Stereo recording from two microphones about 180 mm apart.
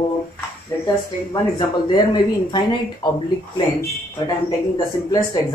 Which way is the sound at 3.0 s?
25° left (ahead or behind).